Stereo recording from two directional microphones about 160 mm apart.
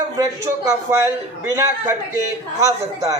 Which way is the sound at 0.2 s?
20° right (ahead or behind).